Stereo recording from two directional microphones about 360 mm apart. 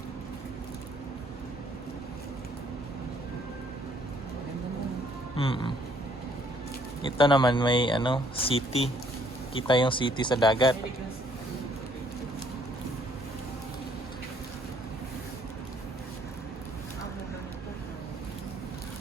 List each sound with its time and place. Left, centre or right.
5.4 s speech: centre
7.0 s speech: centre